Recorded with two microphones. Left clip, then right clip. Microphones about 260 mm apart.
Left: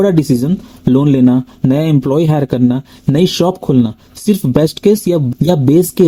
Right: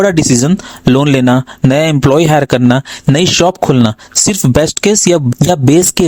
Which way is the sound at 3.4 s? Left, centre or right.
Right.